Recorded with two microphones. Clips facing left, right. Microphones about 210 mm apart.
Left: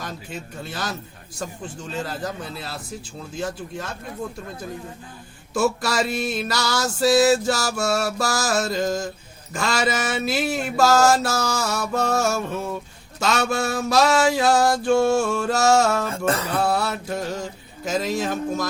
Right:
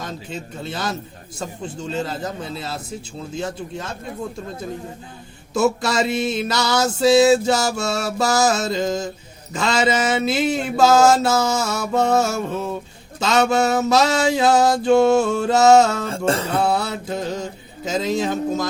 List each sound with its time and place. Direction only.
0.0 s mantra: 25° right (ahead or behind)
5.5 s mantra: 20° right (ahead or behind)